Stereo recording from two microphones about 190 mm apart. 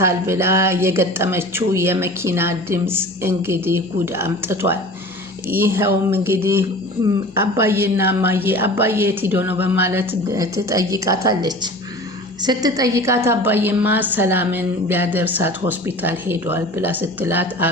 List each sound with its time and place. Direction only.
0.0 s a woman's voice: 15° right (ahead or behind)